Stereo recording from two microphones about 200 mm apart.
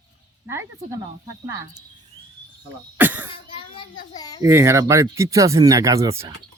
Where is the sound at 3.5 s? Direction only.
25° left (ahead or behind).